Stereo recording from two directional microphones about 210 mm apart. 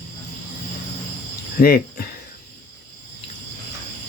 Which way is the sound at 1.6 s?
45° left (ahead or behind).